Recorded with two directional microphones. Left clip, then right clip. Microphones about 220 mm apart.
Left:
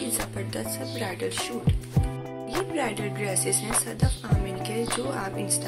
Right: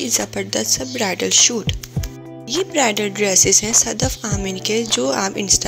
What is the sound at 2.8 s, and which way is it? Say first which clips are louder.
Speech: right 11 dB; 30° right (ahead or behind).